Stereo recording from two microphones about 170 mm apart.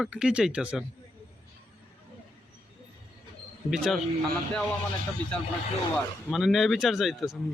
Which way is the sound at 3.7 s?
Centre (ahead or behind).